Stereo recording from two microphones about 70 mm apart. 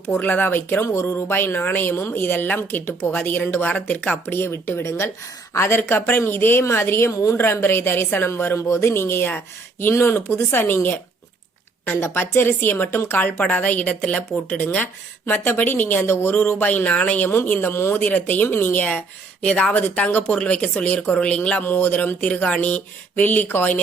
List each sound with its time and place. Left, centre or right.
0.2 s a woman's voice: left
4.3 s a woman's voice: left
7.4 s a woman's voice: left
12.1 s a woman's voice: left
18.0 s a woman's voice: left